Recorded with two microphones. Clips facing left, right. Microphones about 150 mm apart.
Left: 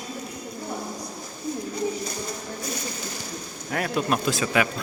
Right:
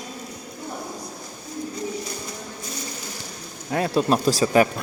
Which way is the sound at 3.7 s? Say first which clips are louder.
Right 4 dB; 30° right (ahead or behind).